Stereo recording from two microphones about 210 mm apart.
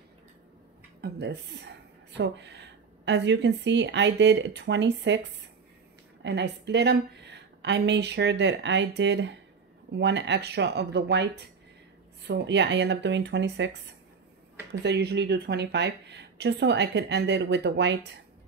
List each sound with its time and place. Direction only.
1.0 s speech: 50° right (ahead or behind)
6.2 s a woman's voice: 55° right (ahead or behind)